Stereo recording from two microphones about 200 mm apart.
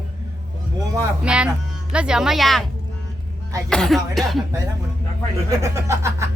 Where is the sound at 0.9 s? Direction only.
5° right (ahead or behind).